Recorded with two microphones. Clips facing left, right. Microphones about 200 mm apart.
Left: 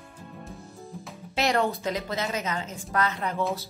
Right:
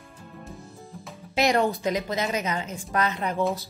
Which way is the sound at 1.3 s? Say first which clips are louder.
Right 3 dB; 15° right (ahead or behind).